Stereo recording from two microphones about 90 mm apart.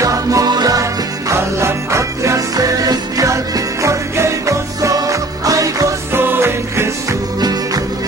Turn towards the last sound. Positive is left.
turn(degrees=-25)  # may be behind; listen again after turning